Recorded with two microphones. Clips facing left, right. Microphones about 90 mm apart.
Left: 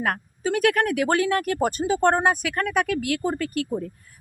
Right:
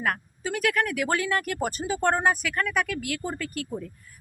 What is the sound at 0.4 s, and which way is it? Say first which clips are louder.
A woman's voice: left 5 dB; 45° left (ahead or behind).